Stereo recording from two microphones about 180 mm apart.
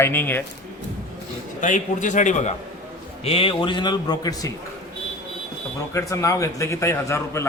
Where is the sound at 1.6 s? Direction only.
45° left (ahead or behind).